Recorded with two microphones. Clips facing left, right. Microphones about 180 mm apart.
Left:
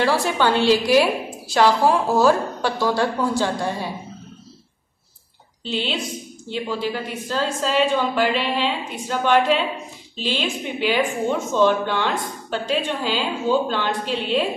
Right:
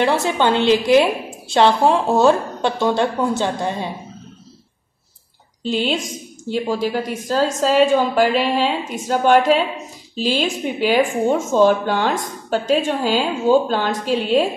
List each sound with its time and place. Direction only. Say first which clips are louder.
0.0 s a woman's voice: right 2 dB; 20° right (ahead or behind)
5.6 s a woman's voice: right 5 dB; 45° right (ahead or behind)